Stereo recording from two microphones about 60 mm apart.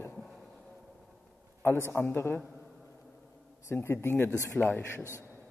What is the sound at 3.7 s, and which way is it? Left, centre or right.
Speech, left.